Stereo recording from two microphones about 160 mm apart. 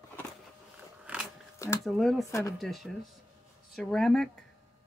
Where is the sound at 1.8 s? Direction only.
Centre (ahead or behind).